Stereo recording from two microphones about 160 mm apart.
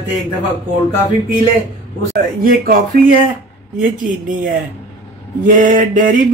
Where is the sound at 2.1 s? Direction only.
60° right (ahead or behind).